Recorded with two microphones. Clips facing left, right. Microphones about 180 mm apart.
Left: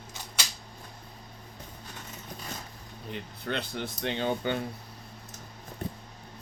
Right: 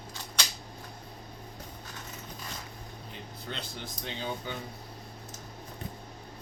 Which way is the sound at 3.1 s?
60° left (ahead or behind).